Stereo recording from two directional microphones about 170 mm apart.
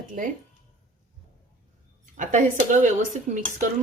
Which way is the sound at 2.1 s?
45° right (ahead or behind).